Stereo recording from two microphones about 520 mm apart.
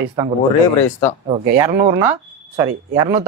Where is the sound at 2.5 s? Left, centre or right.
Centre.